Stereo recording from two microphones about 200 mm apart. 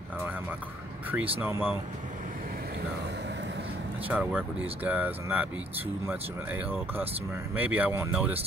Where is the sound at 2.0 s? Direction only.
50° right (ahead or behind).